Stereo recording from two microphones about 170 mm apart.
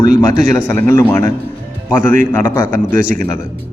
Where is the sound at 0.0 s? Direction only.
50° right (ahead or behind).